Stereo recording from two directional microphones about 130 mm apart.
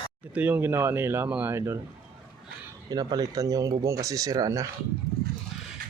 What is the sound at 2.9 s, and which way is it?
Speech, 30° right (ahead or behind).